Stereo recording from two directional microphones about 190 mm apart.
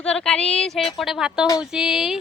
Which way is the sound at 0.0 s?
5° left (ahead or behind).